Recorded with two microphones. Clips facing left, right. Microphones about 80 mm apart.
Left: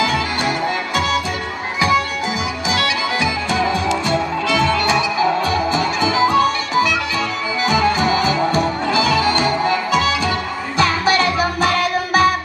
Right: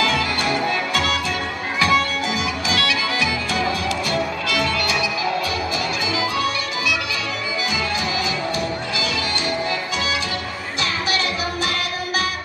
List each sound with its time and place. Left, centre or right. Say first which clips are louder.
0.0 s music: left 2 dB; left